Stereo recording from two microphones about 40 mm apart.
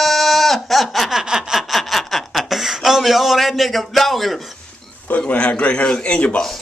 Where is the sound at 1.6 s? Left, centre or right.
Centre.